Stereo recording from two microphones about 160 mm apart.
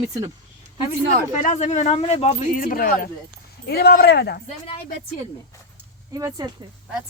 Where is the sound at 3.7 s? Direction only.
85° left.